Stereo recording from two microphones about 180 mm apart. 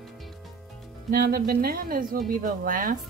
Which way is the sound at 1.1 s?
60° right (ahead or behind).